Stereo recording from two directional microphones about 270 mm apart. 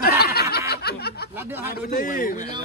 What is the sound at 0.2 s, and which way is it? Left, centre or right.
Snicker, left.